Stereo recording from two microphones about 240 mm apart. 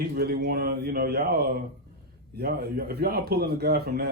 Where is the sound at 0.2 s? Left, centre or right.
Right.